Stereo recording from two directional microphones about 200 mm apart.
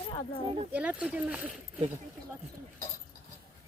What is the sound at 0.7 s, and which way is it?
Speech, 5° right (ahead or behind).